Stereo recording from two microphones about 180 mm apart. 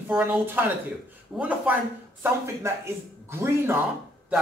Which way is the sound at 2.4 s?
15° right (ahead or behind).